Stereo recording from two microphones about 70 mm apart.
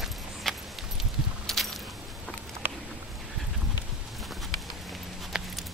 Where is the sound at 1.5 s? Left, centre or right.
Centre.